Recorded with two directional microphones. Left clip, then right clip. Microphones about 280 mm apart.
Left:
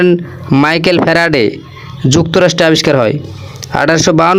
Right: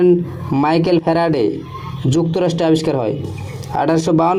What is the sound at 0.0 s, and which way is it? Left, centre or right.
Speech, left.